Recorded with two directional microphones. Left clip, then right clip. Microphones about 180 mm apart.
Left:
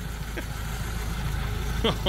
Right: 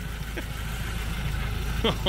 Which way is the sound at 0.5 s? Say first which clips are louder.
Even; 15° right (ahead or behind).